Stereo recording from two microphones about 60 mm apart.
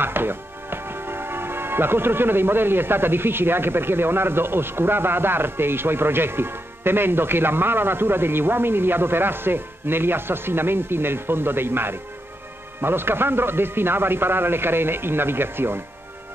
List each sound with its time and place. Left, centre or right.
0.0 s speech: right